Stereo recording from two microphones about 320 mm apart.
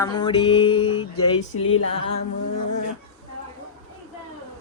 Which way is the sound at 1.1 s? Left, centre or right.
Left.